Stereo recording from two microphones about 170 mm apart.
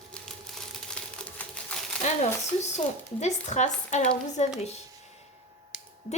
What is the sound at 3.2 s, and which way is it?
Speech, 45° left (ahead or behind).